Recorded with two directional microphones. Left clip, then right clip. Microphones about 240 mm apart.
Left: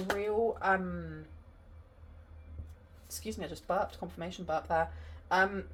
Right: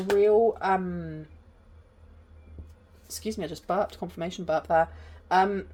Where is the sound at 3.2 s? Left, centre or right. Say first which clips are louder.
Right 6 dB; right.